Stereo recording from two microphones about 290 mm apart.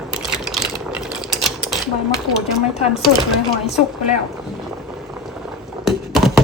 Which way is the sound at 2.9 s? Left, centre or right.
Centre.